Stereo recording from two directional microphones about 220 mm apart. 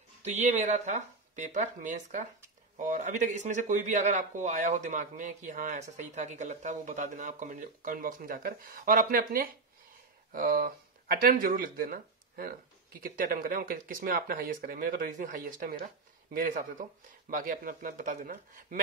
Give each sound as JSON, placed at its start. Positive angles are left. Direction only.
{"t": 0.2, "sound": "speech", "side_deg": -30}